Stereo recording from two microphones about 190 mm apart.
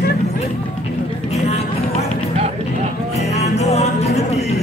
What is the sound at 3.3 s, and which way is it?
Music, 35° left (ahead or behind).